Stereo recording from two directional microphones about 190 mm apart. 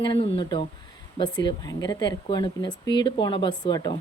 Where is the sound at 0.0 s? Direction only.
25° left (ahead or behind).